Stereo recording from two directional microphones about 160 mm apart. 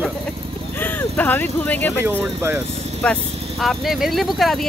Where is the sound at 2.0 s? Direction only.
15° right (ahead or behind).